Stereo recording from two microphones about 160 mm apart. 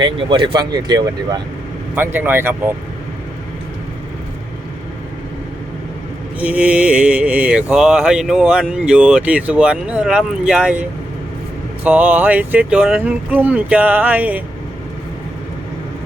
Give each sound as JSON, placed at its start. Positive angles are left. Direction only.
{"t": 0.0, "sound": "speech", "side_deg": -30}
{"t": 2.0, "sound": "mantra", "side_deg": -15}
{"t": 6.4, "sound": "mantra", "side_deg": -10}